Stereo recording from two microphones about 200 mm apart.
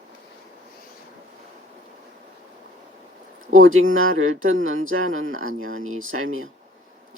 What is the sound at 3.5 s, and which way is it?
Speech, 90° right.